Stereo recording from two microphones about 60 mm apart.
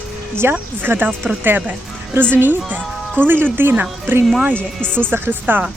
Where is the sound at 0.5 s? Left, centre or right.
Right.